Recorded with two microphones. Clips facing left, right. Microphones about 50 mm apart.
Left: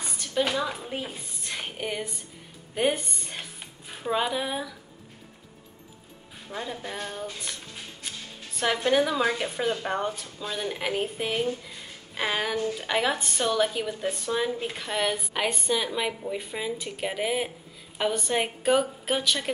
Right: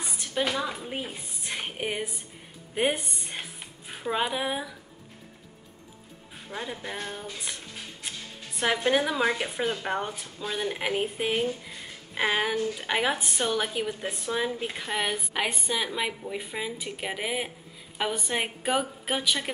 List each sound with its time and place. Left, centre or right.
0.2 s a sound: centre
0.5 s a woman's voice: centre
2.7 s music: centre
6.5 s a woman's voice: centre
8.5 s a woman's voice: centre